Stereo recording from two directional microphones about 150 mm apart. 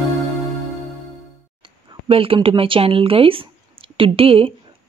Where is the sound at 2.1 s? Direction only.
35° right (ahead or behind).